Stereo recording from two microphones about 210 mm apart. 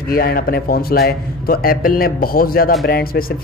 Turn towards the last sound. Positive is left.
turn(degrees=45)  # may be behind; listen again after turning